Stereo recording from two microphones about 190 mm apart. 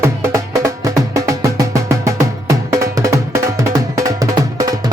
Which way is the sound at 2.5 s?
15° right (ahead or behind).